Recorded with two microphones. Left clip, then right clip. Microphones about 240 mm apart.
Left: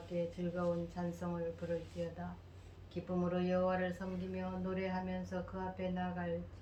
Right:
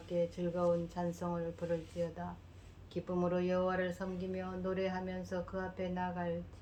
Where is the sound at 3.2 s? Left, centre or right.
Right.